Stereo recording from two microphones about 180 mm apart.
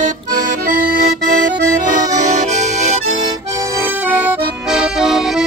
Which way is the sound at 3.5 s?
15° right (ahead or behind).